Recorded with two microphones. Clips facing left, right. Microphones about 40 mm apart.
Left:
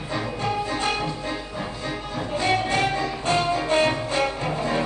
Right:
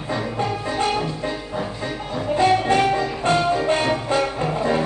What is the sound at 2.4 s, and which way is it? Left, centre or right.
Music, centre.